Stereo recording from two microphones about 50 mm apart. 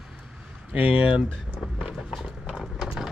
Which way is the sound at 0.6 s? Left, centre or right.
Right.